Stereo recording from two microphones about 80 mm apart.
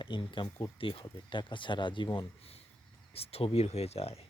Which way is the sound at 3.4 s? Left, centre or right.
Left.